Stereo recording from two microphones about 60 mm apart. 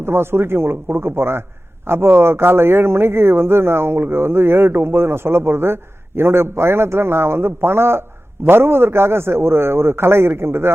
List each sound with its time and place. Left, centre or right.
0.0 s speech: right